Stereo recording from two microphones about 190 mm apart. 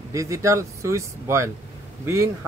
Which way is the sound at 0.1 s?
15° right (ahead or behind).